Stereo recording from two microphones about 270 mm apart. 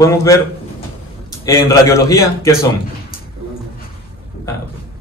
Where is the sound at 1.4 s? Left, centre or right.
Centre.